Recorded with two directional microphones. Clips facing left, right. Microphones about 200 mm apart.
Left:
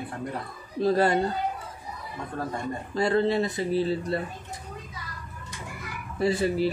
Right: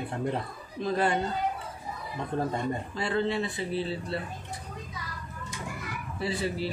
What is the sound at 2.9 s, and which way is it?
A man's voice, 40° left (ahead or behind).